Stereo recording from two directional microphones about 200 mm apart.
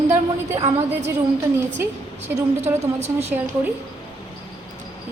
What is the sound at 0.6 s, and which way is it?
Speech, 35° right (ahead or behind).